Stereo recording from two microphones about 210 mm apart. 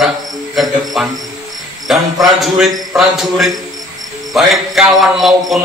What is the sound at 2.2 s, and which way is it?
Mantra, centre (ahead or behind).